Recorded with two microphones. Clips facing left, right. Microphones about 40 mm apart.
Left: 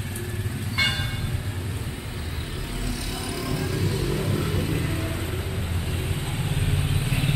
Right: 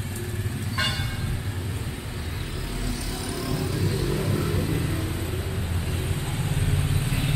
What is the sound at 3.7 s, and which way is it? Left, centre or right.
Vehicle, left.